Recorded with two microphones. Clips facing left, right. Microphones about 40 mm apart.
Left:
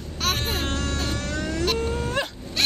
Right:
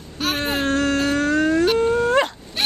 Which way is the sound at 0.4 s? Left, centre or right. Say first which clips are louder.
Right 6 dB; right.